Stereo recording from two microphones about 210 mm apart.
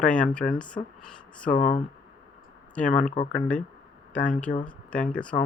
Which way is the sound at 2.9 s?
35° left (ahead or behind).